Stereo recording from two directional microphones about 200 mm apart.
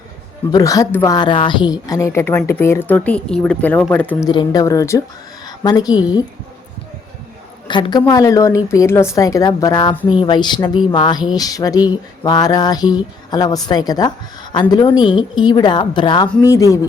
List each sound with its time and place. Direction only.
0.5 s a woman's voice: 15° left (ahead or behind)
4.3 s a woman's voice: 20° left (ahead or behind)
7.7 s a sound: 20° left (ahead or behind)
8.0 s a woman's voice: 15° left (ahead or behind)
10.1 s a sound: 25° left (ahead or behind)
16.4 s a woman's voice: 15° left (ahead or behind)